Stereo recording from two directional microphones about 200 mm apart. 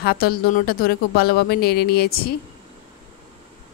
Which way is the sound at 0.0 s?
50° left (ahead or behind).